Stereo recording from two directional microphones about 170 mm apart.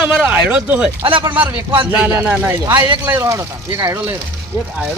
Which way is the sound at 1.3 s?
10° right (ahead or behind).